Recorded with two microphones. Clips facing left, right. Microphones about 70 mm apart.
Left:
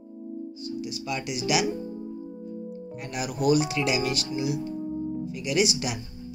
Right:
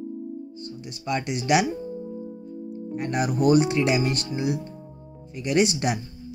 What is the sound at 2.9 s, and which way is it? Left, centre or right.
Speech, right.